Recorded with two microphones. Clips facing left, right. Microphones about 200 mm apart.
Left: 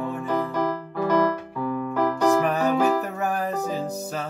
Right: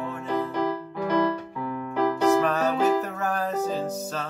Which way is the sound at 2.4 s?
15° left (ahead or behind).